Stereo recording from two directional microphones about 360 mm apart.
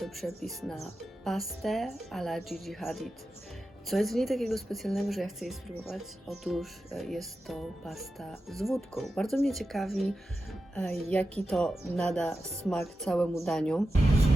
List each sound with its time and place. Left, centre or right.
0.0 s speech: centre